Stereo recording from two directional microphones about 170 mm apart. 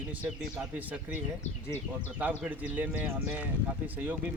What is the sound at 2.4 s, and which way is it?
Speech, 10° right (ahead or behind).